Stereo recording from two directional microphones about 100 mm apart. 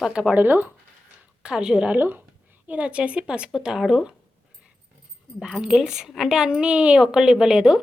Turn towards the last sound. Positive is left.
turn(degrees=-5)  # may be behind; listen again after turning